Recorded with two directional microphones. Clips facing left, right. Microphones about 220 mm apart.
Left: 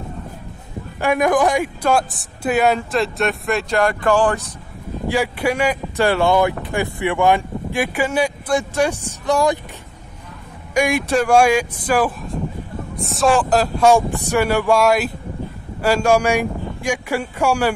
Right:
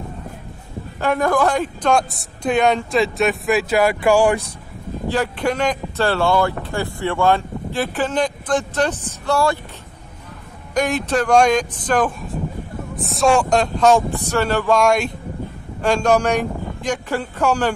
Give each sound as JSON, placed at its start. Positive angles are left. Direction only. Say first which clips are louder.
{"t": 0.9, "sound": "speech", "louder": "left 2 dB", "side_deg": 10}
{"t": 5.0, "sound": "speech", "louder": "left 1 dB", "side_deg": 10}
{"t": 10.7, "sound": "speech", "louder": "left 2 dB", "side_deg": 10}